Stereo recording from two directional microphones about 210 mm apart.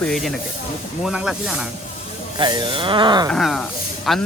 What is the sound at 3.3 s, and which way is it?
Speech, centre (ahead or behind).